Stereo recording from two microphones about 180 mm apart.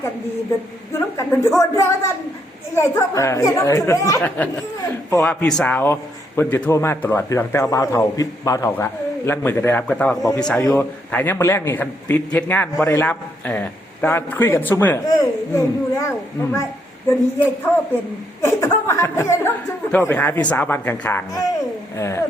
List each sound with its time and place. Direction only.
0.9 s a man's voice: 15° left (ahead or behind)
10.6 s a man's voice: 15° left (ahead or behind)